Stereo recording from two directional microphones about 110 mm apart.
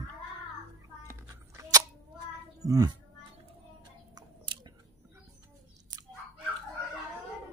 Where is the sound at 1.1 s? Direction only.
30° right (ahead or behind).